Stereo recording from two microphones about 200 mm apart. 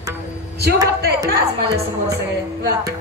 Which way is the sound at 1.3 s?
55° right (ahead or behind).